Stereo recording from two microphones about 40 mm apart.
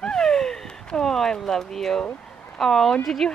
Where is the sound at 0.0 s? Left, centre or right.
Centre.